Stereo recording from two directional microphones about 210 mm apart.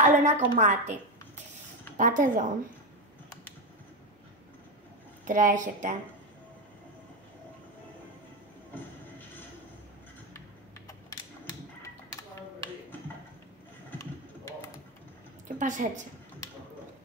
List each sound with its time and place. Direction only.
0.0 s a sound: 35° right (ahead or behind)
0.6 s speech: 35° right (ahead or behind)
2.0 s speech: 40° right (ahead or behind)
5.2 s speech: 40° right (ahead or behind)
10.9 s mechanisms: 15° left (ahead or behind)
15.4 s a sound: 35° right (ahead or behind)